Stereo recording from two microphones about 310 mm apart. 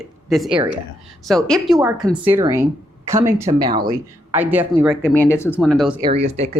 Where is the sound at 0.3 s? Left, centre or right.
Centre.